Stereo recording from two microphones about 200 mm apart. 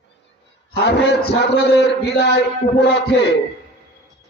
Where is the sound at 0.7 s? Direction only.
60° left (ahead or behind).